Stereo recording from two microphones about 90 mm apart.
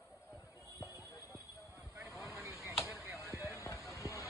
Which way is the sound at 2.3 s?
35° right (ahead or behind).